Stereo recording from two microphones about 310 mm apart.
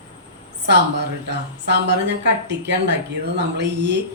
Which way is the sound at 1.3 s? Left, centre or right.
Right.